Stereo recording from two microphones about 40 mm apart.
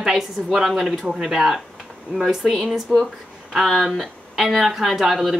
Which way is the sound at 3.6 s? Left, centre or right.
Centre.